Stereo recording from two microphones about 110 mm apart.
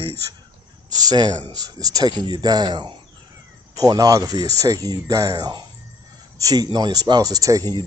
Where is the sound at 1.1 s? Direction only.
40° right (ahead or behind).